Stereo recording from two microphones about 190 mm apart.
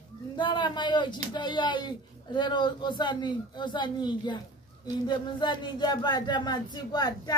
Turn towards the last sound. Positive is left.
turn(degrees=20)  # may be behind; listen again after turning